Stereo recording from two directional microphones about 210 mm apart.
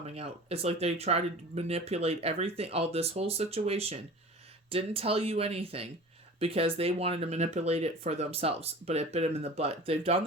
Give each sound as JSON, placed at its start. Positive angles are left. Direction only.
{"t": 0.0, "sound": "speech", "side_deg": -30}